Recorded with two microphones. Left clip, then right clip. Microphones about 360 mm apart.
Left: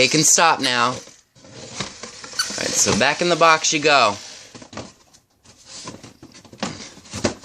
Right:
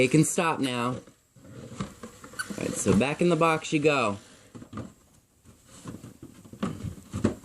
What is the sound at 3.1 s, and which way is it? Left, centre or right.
Speech, left.